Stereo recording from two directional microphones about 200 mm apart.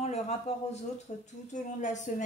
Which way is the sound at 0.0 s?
35° left (ahead or behind).